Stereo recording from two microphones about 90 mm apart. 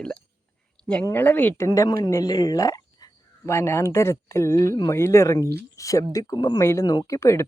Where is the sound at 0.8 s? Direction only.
10° left (ahead or behind).